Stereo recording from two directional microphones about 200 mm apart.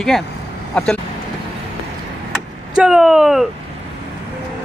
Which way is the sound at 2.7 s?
5° right (ahead or behind).